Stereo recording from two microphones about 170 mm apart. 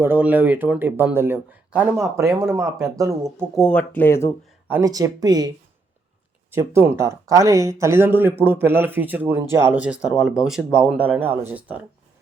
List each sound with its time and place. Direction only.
0.0 s speech: 10° right (ahead or behind)
3.5 s speech: 5° left (ahead or behind)
4.7 s speech: 20° right (ahead or behind)
6.5 s speech: 15° right (ahead or behind)